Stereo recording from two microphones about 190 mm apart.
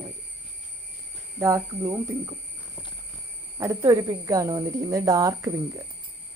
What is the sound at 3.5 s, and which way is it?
Speech, 15° right (ahead or behind).